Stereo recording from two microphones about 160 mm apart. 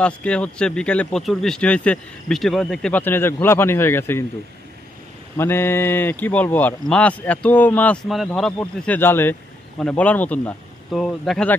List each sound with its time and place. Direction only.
0.0 s speech: 5° left (ahead or behind)
5.4 s speech: 15° left (ahead or behind)